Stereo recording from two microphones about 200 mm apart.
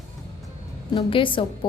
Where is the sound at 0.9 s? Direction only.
25° left (ahead or behind).